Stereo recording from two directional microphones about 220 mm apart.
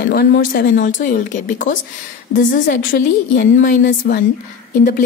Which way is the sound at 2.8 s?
50° left (ahead or behind).